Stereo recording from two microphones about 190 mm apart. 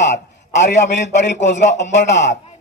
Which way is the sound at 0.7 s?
65° left (ahead or behind).